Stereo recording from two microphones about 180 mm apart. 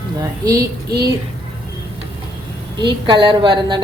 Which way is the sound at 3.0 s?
25° right (ahead or behind).